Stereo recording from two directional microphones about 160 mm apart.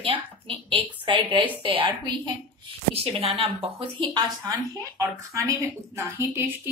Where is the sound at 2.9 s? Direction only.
40° right (ahead or behind); by 6.7 s 15° right (ahead or behind).